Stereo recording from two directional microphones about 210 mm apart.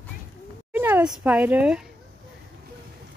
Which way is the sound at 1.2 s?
5° right (ahead or behind).